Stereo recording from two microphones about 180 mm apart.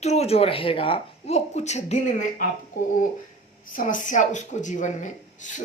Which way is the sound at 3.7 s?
45° left (ahead or behind).